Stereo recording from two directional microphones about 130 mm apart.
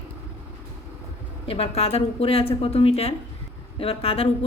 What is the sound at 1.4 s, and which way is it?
A woman's voice, 50° left (ahead or behind).